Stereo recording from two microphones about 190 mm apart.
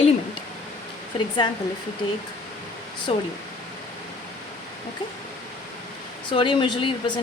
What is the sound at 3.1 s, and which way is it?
Speech, 30° left (ahead or behind).